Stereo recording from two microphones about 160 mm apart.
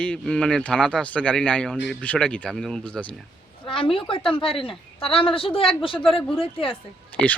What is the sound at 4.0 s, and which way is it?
Speech, 35° left (ahead or behind).